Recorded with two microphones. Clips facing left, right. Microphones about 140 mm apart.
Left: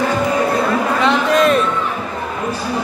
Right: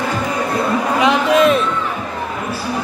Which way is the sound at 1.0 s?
5° right (ahead or behind).